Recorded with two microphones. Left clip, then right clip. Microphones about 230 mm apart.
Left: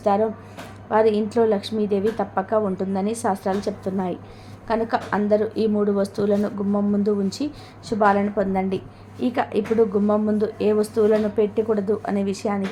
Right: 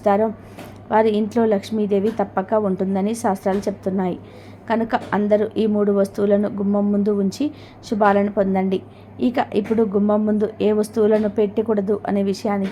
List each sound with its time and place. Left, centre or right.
0.0 s a woman's voice: centre